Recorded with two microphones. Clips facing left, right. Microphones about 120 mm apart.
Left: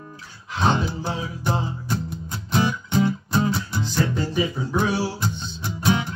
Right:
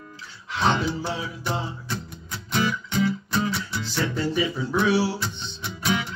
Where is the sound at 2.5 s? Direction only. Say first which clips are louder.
Left 3 dB; 35° left (ahead or behind).